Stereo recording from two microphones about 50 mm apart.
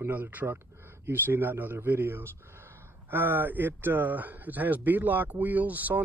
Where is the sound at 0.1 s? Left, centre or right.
Right.